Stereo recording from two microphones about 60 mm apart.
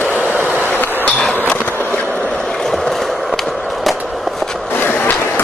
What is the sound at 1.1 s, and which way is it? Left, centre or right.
Skateboard, centre.